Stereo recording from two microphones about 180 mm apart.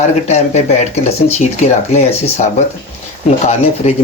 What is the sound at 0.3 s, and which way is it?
Speech, 40° left (ahead or behind).